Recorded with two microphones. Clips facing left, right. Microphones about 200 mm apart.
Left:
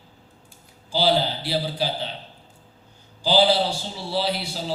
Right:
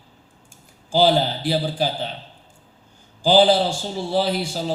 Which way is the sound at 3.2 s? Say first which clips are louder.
Right 4 dB; 50° right (ahead or behind).